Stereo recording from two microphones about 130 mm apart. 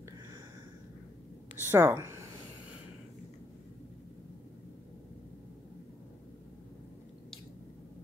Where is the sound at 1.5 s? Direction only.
15° right (ahead or behind).